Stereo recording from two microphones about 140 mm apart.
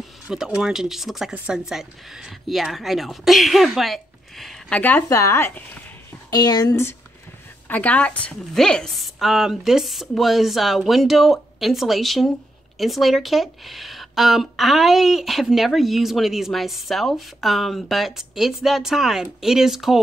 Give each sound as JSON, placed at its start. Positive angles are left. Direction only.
{"t": 0.3, "sound": "speech", "side_deg": -5}